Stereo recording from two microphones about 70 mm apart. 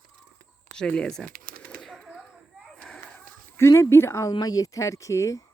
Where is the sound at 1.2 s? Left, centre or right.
Centre.